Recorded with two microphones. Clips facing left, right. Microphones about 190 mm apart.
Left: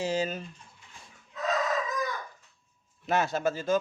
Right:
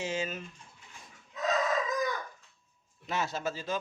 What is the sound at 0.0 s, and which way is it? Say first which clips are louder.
Speech: left 5 dB; 35° left (ahead or behind).